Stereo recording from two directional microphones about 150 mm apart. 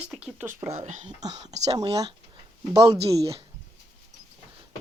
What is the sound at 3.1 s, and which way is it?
Speech, 40° right (ahead or behind).